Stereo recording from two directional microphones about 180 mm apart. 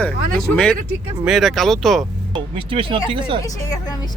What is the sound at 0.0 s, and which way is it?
Speech, 5° left (ahead or behind).